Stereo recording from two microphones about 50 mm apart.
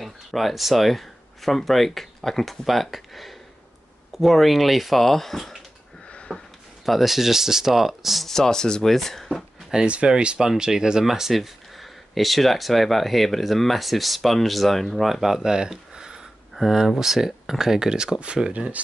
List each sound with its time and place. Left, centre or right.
0.0 s speech: centre
6.0 s a sound: left
6.9 s speech: centre
8.3 s speech: centre
9.8 s speech: right